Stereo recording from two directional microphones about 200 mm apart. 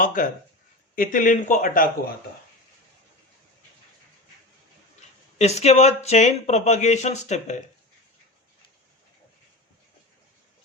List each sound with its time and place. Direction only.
0.0 s speech: 40° left (ahead or behind)
5.4 s speech: 35° left (ahead or behind)